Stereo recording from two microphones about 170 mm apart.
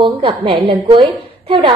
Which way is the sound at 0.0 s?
30° right (ahead or behind).